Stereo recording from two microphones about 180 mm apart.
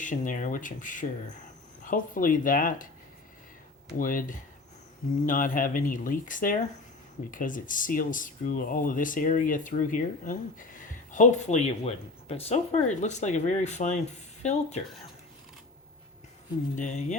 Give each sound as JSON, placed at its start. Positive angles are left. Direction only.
{"t": 0.0, "sound": "speech", "side_deg": 45}
{"t": 3.9, "sound": "speech", "side_deg": 50}
{"t": 16.7, "sound": "speech", "side_deg": 45}